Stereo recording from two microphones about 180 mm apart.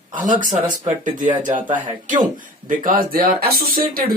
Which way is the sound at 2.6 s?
50° right (ahead or behind).